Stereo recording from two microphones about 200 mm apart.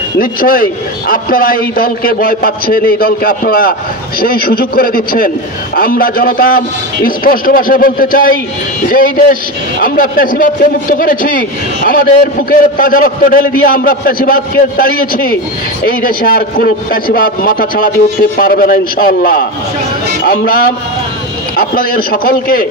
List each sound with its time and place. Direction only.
0.2 s a man's voice: 45° left (ahead or behind)